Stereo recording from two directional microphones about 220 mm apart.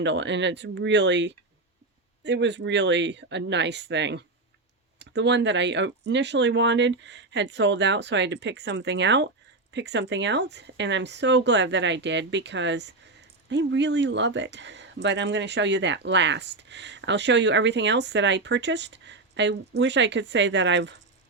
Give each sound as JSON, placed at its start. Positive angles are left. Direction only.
{"t": 0.0, "sound": "speech", "side_deg": -55}